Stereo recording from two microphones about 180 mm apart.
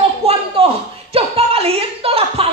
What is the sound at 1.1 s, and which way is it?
Music, 35° right (ahead or behind).